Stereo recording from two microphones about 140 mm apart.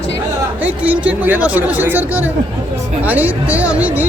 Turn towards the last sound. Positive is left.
turn(degrees=-10)  # may be behind; listen again after turning